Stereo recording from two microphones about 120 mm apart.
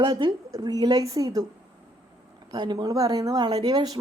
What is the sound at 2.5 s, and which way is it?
Speech, 35° right (ahead or behind).